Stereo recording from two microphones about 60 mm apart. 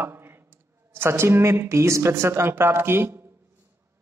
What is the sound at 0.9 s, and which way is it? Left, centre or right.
A man's voice, right.